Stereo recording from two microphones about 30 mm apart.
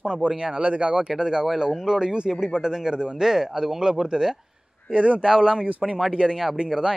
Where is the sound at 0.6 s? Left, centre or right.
Right.